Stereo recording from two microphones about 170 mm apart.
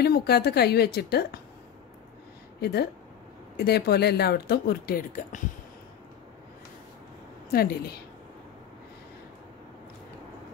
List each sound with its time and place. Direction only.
0.0 s speech: 70° left (ahead or behind)
2.6 s speech: 70° left (ahead or behind); by 5.4 s 55° left (ahead or behind)
7.5 s a woman's voice: 65° left (ahead or behind)